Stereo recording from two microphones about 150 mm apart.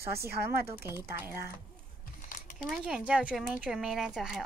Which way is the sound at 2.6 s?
5° right (ahead or behind).